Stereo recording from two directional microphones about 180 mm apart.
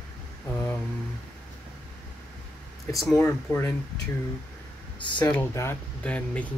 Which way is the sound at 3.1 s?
15° left (ahead or behind).